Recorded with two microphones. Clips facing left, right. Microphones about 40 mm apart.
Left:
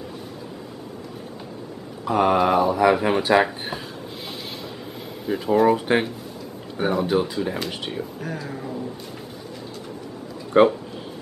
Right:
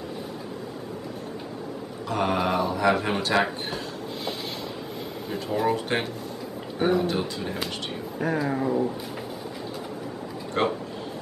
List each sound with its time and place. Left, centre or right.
2.0 s speech: centre
3.6 s a sound: centre
5.3 s speech: centre
8.2 s speech: centre
10.6 s speech: centre